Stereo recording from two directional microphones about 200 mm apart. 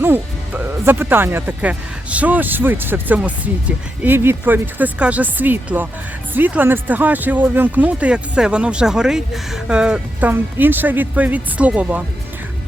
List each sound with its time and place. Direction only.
0.0 s speech: 10° right (ahead or behind)